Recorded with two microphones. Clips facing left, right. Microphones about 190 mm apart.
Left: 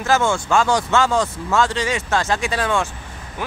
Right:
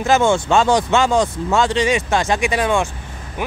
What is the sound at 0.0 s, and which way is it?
Speech, 20° right (ahead or behind).